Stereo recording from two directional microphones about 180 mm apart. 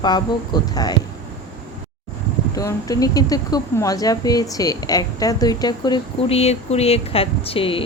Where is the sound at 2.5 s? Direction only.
20° left (ahead or behind).